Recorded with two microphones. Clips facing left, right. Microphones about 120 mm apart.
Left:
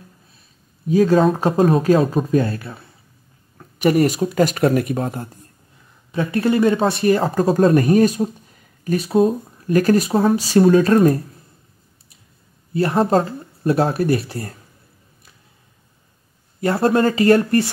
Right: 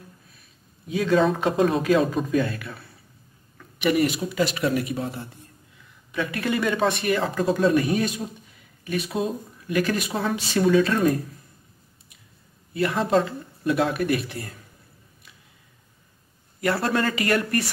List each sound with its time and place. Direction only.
0.8 s speech: 40° left (ahead or behind)
6.1 s speech: 35° left (ahead or behind)
12.7 s speech: 35° left (ahead or behind)
16.6 s speech: 35° left (ahead or behind)